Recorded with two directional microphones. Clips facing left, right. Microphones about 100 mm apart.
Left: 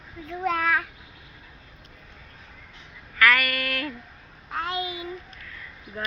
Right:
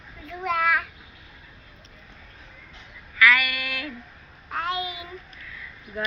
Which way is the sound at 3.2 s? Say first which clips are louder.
Even; 45° left (ahead or behind).